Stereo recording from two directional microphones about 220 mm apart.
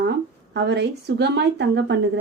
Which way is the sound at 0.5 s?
50° right (ahead or behind).